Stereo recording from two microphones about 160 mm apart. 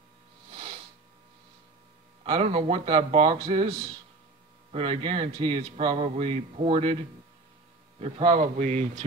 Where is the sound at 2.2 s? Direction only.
35° right (ahead or behind).